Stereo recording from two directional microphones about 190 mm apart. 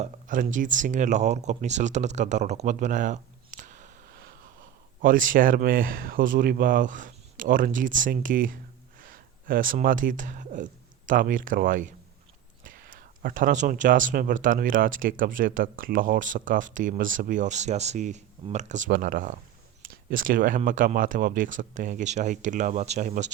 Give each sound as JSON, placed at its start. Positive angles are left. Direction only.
{"t": 0.0, "sound": "speech", "side_deg": -45}